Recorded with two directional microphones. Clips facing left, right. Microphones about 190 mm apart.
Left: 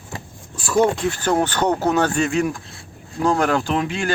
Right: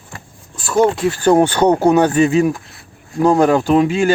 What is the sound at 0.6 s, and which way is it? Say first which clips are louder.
Speech: right 3 dB; 5° right (ahead or behind).